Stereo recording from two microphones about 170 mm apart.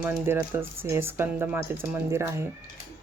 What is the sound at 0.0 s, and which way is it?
Speech, 10° right (ahead or behind).